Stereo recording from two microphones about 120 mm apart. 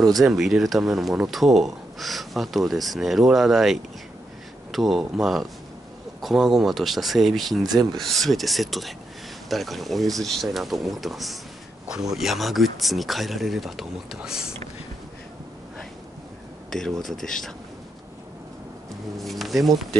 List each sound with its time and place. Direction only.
0.2 s speech: centre (ahead or behind)
7.6 s speech: 35° right (ahead or behind)
8.0 s speech: centre (ahead or behind)
17.0 s speech: centre (ahead or behind)
19.1 s speech: centre (ahead or behind)